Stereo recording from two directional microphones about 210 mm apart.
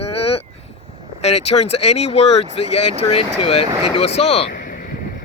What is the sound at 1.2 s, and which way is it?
Speech, 30° left (ahead or behind).